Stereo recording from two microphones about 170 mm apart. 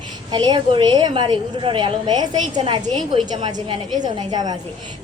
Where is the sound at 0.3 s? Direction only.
25° right (ahead or behind).